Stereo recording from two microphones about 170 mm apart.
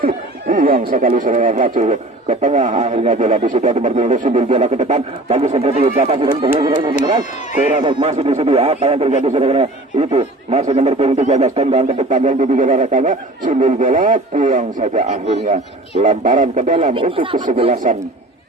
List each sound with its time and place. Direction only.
0.0 s speech: 55° right (ahead or behind); by 6.5 s 40° right (ahead or behind)
6.6 s speech: 25° right (ahead or behind)
7.8 s speech: 40° right (ahead or behind)
16.9 s speech: 30° right (ahead or behind)